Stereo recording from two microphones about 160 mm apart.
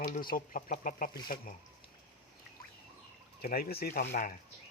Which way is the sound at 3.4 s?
70° left (ahead or behind).